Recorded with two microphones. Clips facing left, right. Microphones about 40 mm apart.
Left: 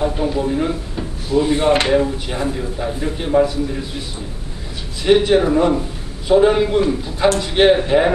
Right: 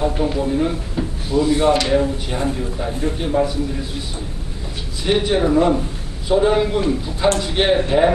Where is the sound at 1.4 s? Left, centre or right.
Left.